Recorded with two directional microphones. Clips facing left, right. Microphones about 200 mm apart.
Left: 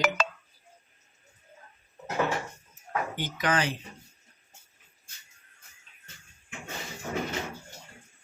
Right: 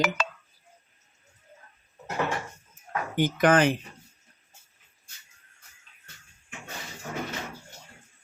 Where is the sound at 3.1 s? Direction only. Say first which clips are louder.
Right 10 dB; 50° right (ahead or behind).